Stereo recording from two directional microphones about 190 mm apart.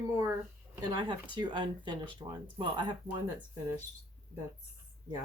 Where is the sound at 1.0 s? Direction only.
25° right (ahead or behind).